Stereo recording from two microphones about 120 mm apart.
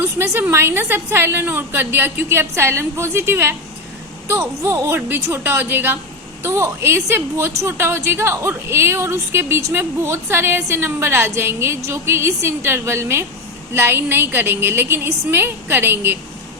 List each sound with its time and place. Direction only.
0.0 s a woman's voice: 20° right (ahead or behind)